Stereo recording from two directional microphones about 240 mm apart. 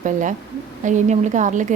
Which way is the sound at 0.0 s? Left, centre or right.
Right.